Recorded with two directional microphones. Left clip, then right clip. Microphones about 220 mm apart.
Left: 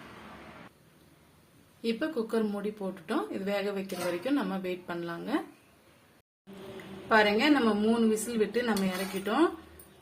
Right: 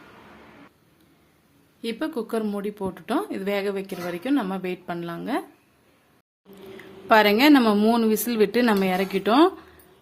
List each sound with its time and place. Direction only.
1.8 s speech: 35° right (ahead or behind)
7.1 s a woman's voice: 50° right (ahead or behind)